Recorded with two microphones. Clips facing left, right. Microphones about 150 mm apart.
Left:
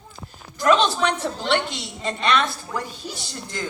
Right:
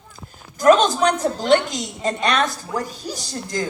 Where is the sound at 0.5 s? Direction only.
45° right (ahead or behind).